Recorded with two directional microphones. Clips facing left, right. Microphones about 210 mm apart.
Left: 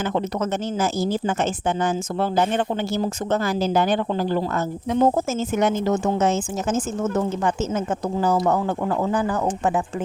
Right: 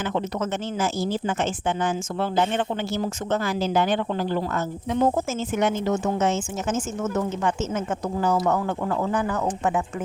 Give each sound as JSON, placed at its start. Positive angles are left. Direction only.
{"t": 0.1, "sound": "speech", "side_deg": 40}